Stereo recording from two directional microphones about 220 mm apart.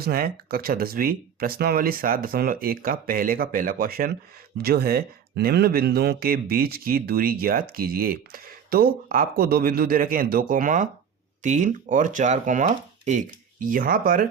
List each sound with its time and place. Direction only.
0.0 s speech: 40° right (ahead or behind)